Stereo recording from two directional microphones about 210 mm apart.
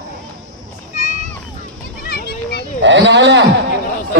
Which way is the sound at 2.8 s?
60° right (ahead or behind).